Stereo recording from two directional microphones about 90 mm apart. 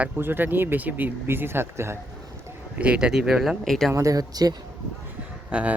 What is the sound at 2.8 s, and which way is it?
Speech, 10° right (ahead or behind).